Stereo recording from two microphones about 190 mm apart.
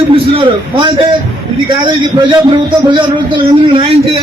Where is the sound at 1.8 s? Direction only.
25° right (ahead or behind).